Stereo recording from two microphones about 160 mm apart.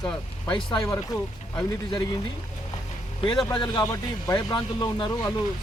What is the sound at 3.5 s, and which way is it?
Speech, 25° left (ahead or behind).